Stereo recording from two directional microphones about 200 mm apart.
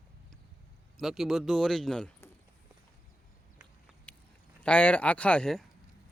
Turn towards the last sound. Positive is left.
turn(degrees=0)  # may be behind; listen again after turning